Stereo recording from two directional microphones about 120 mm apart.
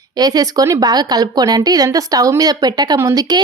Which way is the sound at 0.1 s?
35° right (ahead or behind).